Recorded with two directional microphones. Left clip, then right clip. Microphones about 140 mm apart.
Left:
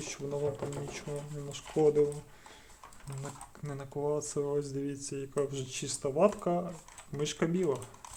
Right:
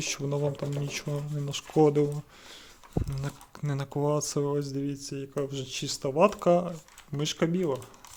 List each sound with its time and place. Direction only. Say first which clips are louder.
0.0 s speech: right 4 dB; 55° right (ahead or behind)
3.2 s speech: right 5 dB; 55° right (ahead or behind); by 6.3 s 40° right (ahead or behind)
6.3 s speech: right 9 dB; 50° right (ahead or behind)
7.2 s speech: right 3 dB; 30° right (ahead or behind)